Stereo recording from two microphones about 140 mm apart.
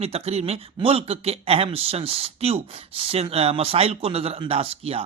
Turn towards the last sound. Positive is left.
turn(degrees=-45)  # may be behind; listen again after turning